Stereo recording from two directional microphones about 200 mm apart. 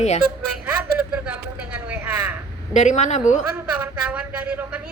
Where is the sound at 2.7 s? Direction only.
35° left (ahead or behind).